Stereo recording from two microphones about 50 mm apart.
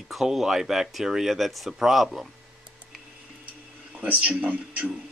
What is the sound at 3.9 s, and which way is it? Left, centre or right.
Speech, right.